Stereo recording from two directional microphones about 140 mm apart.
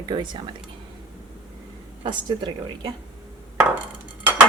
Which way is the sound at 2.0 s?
35° right (ahead or behind).